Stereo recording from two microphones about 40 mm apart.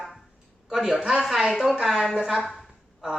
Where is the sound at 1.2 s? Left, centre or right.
Centre.